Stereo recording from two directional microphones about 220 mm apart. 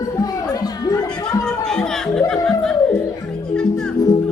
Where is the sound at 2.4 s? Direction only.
Centre (ahead or behind).